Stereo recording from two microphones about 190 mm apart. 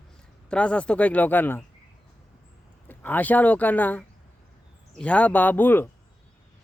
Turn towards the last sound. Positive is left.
turn(degrees=10)  # may be behind; listen again after turning